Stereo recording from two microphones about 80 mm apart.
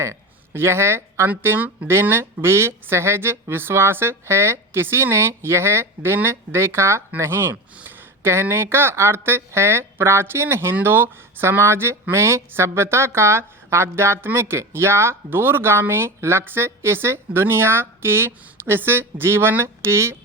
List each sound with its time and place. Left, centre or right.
0.0 s speech: right